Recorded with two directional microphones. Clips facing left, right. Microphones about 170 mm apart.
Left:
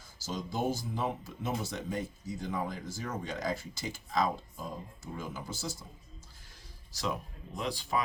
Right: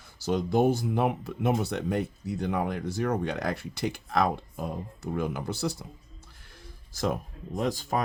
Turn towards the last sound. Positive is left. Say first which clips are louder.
# right 6 dB
turn(degrees=-45)  # may be behind; listen again after turning